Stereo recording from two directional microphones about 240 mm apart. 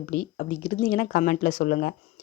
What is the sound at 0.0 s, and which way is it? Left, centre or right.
Speech, left.